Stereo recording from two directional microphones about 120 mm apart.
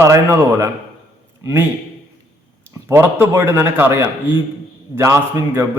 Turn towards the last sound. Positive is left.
turn(degrees=-20)  # may be behind; listen again after turning